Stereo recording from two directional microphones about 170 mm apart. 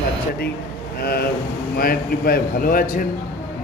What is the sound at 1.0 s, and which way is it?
A man's voice, 65° left (ahead or behind).